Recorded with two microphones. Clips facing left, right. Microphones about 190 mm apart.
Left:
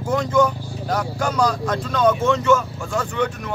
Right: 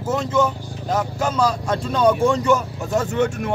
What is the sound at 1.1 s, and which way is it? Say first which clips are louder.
Speech: left 1 dB; 25° right (ahead or behind).